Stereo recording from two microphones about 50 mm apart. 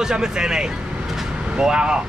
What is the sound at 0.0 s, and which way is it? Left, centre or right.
Speech, centre.